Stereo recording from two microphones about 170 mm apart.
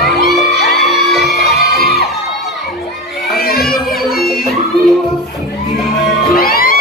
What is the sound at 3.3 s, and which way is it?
Children playing, 65° left (ahead or behind).